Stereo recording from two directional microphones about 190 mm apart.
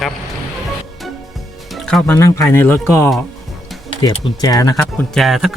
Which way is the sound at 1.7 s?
Centre (ahead or behind).